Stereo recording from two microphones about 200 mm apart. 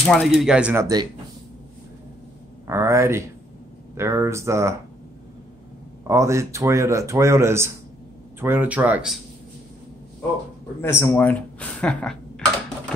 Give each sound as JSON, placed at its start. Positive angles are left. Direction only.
{"t": 0.0, "sound": "speech", "side_deg": 0}
{"t": 2.6, "sound": "speech", "side_deg": -15}
{"t": 6.0, "sound": "speech", "side_deg": -15}
{"t": 10.8, "sound": "speech", "side_deg": 10}